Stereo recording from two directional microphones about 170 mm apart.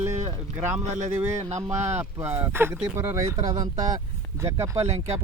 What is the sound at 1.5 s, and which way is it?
Speech, 40° right (ahead or behind).